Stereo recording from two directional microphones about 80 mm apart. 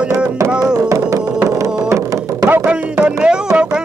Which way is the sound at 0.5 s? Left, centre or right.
Centre.